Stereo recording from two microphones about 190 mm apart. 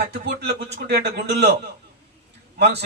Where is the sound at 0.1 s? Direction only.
60° right (ahead or behind).